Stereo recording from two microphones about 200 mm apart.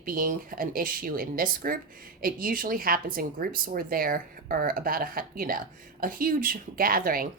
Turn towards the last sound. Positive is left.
turn(degrees=-45)  # may be behind; listen again after turning